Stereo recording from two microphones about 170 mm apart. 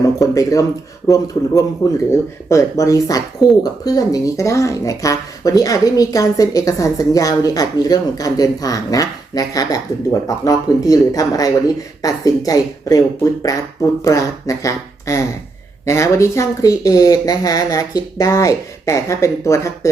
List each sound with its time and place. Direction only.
0.2 s speech: 20° left (ahead or behind)